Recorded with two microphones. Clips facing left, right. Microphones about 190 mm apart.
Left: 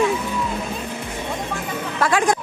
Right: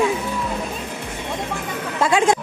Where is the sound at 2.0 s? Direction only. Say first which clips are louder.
Right 2 dB; 25° right (ahead or behind).